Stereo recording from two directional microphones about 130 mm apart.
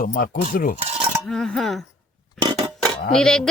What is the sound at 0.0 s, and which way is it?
Cutlery, 90° left.